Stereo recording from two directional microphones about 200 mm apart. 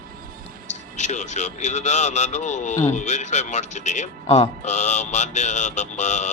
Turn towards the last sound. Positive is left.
turn(degrees=35)  # may be behind; listen again after turning